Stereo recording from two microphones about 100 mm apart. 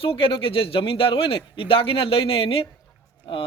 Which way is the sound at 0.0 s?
65° left (ahead or behind).